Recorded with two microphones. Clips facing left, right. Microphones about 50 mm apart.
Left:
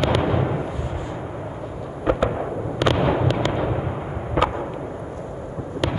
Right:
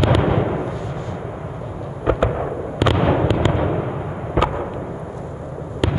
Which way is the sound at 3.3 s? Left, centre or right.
Centre.